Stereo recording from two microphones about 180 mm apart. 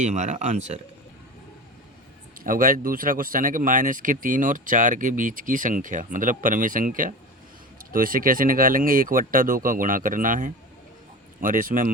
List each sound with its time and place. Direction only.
0.0 s speech: 40° right (ahead or behind)
2.4 s speech: 50° right (ahead or behind)